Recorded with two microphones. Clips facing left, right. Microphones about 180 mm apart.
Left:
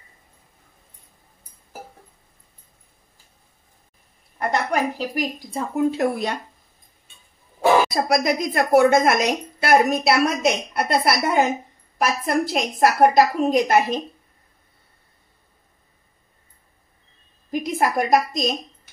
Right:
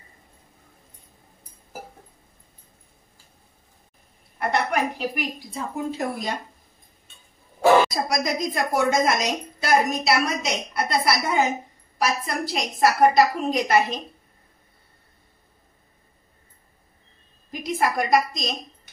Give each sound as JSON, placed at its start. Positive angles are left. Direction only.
{"t": 4.4, "sound": "a woman's voice", "side_deg": 40}
{"t": 5.9, "sound": "a woman's voice", "side_deg": 65}
{"t": 7.9, "sound": "a woman's voice", "side_deg": 60}
{"t": 17.5, "sound": "a woman's voice", "side_deg": 45}